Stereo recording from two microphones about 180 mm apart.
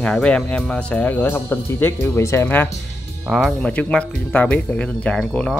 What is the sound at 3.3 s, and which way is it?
Speech, centre (ahead or behind).